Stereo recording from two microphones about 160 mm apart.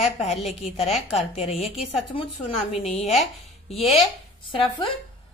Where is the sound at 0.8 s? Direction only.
Centre (ahead or behind).